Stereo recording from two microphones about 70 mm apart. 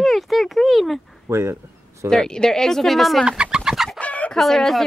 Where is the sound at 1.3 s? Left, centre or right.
Right.